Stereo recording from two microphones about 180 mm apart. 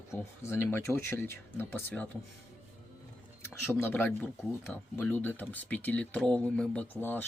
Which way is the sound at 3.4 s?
10° left (ahead or behind).